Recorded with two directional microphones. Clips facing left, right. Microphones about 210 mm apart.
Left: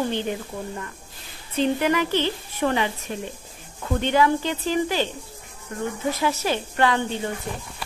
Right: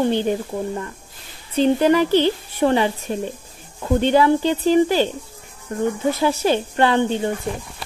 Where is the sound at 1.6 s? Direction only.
35° right (ahead or behind).